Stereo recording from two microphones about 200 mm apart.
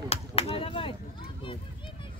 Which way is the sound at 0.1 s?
30° left (ahead or behind).